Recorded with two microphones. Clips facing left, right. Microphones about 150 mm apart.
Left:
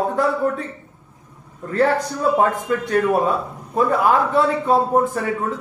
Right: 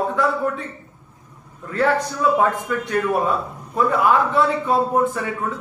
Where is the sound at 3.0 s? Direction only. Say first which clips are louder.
Left 2 dB; 25° left (ahead or behind).